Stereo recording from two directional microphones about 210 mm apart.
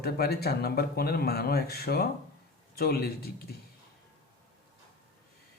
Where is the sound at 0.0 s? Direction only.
50° left (ahead or behind).